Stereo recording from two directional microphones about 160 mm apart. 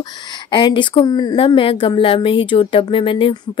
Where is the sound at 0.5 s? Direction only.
30° left (ahead or behind).